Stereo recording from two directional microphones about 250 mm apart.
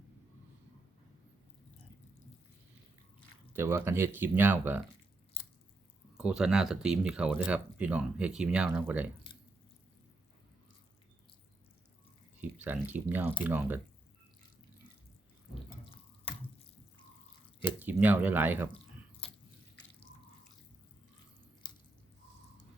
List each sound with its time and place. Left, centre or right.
3.5 s speech: centre
6.1 s speech: centre
12.4 s a sound: centre
12.9 s speech: centre
17.6 s speech: centre
21.6 s a sound: centre